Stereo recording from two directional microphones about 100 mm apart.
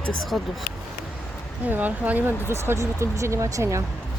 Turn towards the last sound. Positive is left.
turn(degrees=-30)  # may be behind; listen again after turning